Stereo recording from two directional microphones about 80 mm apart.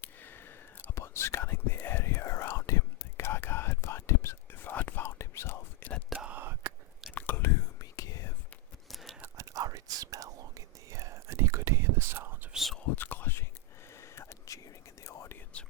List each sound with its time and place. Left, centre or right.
0.0 s whispering: left
6.1 s whispering: centre
6.4 s whispering: right
7.1 s whispering: left
7.8 s whispering: left
9.4 s whispering: right
12.5 s whispering: centre
13.0 s whispering: left
14.0 s a sound: left
15.0 s whispering: left